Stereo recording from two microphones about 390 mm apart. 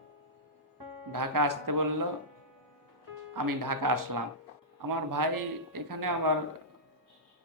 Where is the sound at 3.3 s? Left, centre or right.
Right.